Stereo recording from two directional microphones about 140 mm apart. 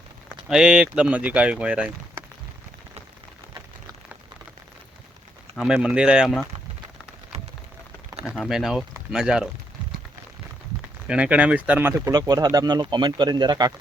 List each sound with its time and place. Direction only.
0.4 s speech: 5° right (ahead or behind)
5.5 s speech: 5° right (ahead or behind)
8.4 s speech: centre (ahead or behind)
11.1 s speech: 10° right (ahead or behind); by 13.7 s 30° right (ahead or behind)